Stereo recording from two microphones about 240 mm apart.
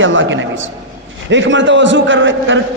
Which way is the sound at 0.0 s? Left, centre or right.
Right.